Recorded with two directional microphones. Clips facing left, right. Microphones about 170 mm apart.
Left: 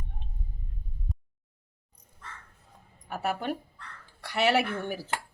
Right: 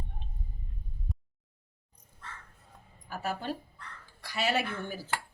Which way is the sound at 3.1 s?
65° left (ahead or behind).